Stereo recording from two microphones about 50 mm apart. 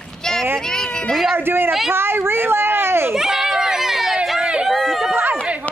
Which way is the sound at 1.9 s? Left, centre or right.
Right.